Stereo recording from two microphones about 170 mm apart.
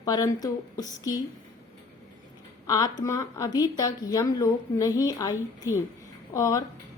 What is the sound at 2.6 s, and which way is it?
A woman's voice, 20° left (ahead or behind).